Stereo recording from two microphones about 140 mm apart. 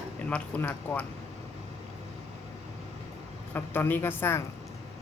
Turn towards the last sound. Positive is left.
turn(degrees=15)  # may be behind; listen again after turning